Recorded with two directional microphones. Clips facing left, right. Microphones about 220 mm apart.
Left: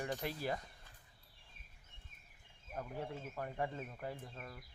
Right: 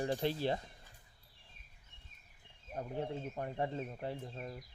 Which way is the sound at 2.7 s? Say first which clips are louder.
Right 4 dB; 30° right (ahead or behind).